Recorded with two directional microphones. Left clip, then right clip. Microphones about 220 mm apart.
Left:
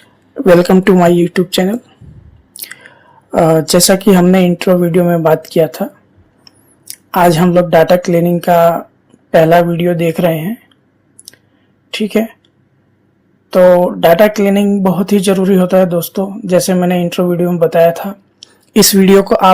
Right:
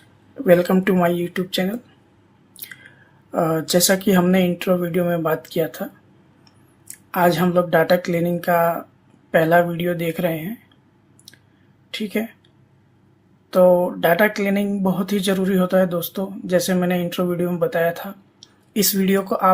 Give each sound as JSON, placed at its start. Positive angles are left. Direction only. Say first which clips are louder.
{"t": 0.3, "sound": "speech", "louder": "left 8 dB", "side_deg": 30}
{"t": 2.6, "sound": "chewing", "louder": "left 9 dB", "side_deg": 30}
{"t": 3.3, "sound": "speech", "louder": "left 10 dB", "side_deg": 30}
{"t": 7.1, "sound": "speech", "louder": "left 8 dB", "side_deg": 25}
{"t": 11.9, "sound": "a woman's voice", "louder": "left 11 dB", "side_deg": 25}
{"t": 13.5, "sound": "speech", "louder": "left 8 dB", "side_deg": 25}